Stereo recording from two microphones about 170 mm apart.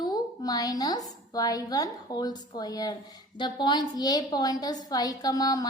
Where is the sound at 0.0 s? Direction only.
20° left (ahead or behind).